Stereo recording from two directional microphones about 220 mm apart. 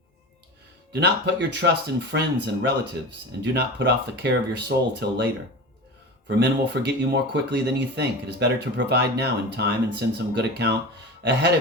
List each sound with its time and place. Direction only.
0.9 s speech: 55° right (ahead or behind)